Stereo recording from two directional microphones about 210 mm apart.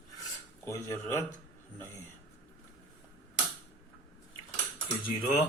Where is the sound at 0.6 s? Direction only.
15° left (ahead or behind).